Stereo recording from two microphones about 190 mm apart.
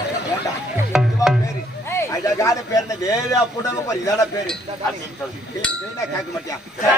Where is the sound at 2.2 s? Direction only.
15° left (ahead or behind).